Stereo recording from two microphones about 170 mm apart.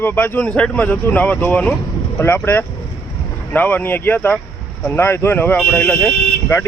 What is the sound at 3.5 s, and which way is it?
Speech, 10° left (ahead or behind).